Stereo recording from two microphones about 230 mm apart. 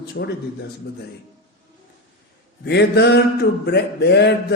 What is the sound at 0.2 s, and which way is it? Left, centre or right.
Speech, left.